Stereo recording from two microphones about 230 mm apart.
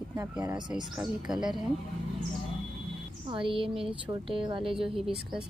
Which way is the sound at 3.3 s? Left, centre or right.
Right.